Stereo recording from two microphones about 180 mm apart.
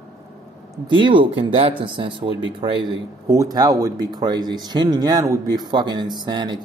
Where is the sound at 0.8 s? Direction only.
25° right (ahead or behind).